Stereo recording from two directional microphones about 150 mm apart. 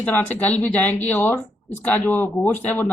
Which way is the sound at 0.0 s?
10° left (ahead or behind).